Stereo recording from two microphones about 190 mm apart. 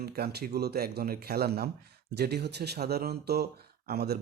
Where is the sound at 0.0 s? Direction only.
55° right (ahead or behind).